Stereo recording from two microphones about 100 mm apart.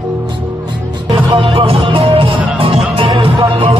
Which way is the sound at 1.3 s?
60° right (ahead or behind).